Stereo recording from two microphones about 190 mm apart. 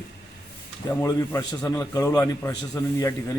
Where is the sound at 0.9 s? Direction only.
20° left (ahead or behind).